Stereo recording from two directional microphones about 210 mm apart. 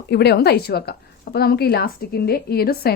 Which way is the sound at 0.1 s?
50° left (ahead or behind).